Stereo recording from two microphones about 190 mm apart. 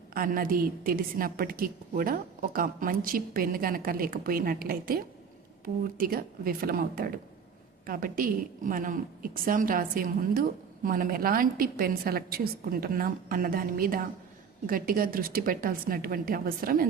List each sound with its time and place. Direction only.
0.1 s a woman's voice: 50° right (ahead or behind)